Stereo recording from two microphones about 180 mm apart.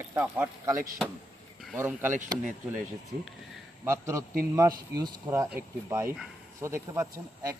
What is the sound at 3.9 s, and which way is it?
Speech, 15° right (ahead or behind).